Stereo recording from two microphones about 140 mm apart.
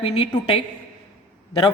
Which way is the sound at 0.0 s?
40° left (ahead or behind).